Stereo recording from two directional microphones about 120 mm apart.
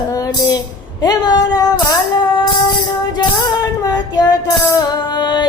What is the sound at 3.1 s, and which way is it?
Music, 30° left (ahead or behind).